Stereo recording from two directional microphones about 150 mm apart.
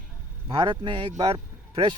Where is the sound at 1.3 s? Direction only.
35° right (ahead or behind).